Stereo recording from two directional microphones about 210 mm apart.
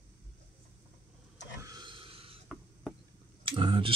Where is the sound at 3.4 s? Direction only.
25° right (ahead or behind).